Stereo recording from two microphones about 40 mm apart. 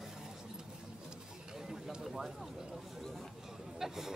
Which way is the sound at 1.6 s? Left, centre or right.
Centre.